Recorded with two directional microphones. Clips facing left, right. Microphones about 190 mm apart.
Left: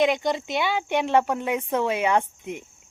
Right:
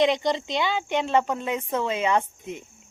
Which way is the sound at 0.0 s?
5° left (ahead or behind).